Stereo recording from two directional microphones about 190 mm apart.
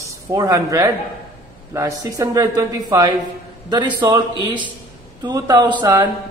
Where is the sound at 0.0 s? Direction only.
15° right (ahead or behind).